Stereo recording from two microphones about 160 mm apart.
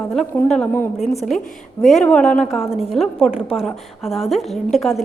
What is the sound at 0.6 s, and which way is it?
A woman's voice, 10° left (ahead or behind).